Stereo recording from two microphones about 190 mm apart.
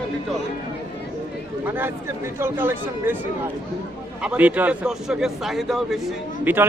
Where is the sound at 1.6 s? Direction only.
10° right (ahead or behind).